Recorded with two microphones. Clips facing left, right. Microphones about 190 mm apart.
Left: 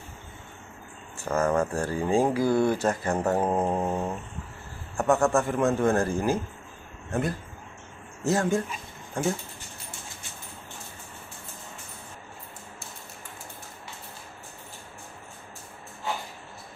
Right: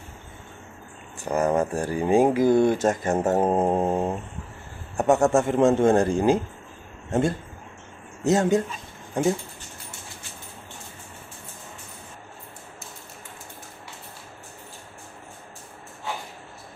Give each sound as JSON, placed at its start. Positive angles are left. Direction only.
{"t": 1.2, "sound": "speech", "side_deg": -15}